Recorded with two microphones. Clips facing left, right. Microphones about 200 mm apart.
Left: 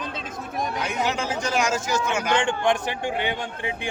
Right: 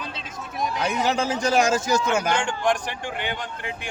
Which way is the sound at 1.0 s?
35° right (ahead or behind).